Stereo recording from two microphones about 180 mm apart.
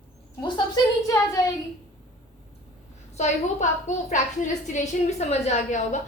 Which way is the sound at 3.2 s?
40° left (ahead or behind).